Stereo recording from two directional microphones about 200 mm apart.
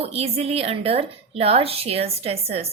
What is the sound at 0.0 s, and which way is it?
A woman's voice, 30° right (ahead or behind).